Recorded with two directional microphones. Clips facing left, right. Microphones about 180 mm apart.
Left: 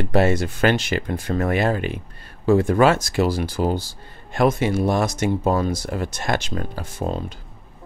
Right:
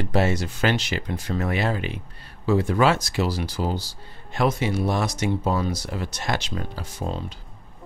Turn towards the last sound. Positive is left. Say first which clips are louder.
# left 4 dB
turn(degrees=50)  # may be behind; listen again after turning